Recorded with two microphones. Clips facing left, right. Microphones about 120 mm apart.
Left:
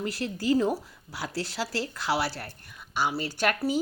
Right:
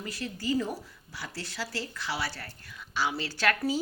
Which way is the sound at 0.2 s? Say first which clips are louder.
Left 5 dB; 45° left (ahead or behind).